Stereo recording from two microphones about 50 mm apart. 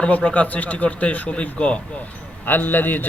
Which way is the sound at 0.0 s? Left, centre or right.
Left.